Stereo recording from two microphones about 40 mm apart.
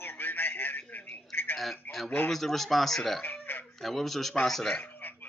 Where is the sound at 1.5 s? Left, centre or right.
Centre.